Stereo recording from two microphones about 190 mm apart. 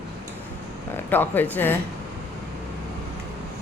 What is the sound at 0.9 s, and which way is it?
Speech, 10° left (ahead or behind).